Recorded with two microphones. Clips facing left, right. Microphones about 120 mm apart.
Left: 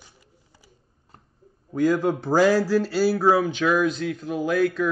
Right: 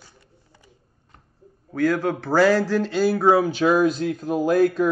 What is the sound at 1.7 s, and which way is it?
A man's voice, 15° left (ahead or behind).